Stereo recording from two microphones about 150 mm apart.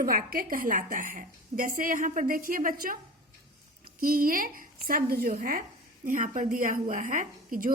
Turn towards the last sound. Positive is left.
turn(degrees=-65)  # may be behind; listen again after turning